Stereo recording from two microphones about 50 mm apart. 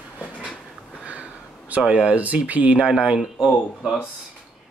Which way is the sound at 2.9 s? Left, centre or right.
Centre.